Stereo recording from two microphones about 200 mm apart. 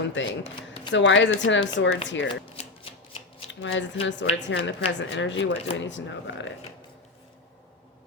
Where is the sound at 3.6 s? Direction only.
70° left (ahead or behind).